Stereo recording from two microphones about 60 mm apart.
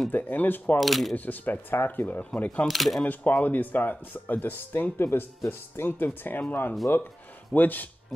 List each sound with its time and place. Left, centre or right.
0.1 s speech: left
0.7 s speech: centre
1.1 s speech: left
2.7 s speech: centre
3.0 s speech: left